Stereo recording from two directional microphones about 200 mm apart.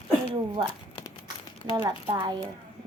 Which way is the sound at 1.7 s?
20° right (ahead or behind).